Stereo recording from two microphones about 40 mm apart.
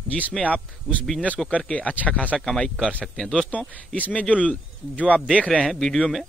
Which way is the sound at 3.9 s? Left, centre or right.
Left.